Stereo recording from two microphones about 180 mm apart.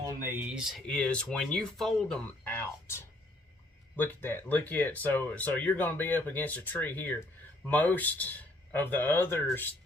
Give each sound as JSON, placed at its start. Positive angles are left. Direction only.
{"t": 0.0, "sound": "speech", "side_deg": -15}